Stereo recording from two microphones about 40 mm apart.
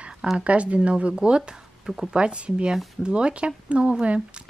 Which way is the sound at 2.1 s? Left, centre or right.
Right.